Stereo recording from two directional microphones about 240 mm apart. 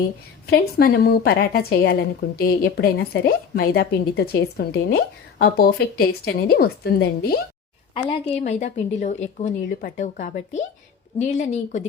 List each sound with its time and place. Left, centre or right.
0.4 s a woman's voice: left
7.9 s a woman's voice: left